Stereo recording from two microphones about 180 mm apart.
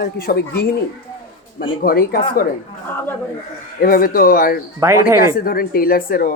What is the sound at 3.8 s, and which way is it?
Speech, 55° left (ahead or behind).